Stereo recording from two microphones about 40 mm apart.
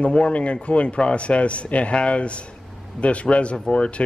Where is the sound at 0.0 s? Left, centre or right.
Left.